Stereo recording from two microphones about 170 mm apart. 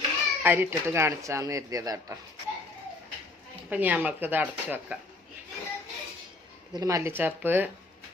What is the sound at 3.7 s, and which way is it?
Speech, 10° right (ahead or behind).